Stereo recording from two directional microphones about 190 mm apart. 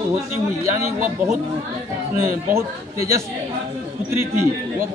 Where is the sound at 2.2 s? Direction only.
15° right (ahead or behind).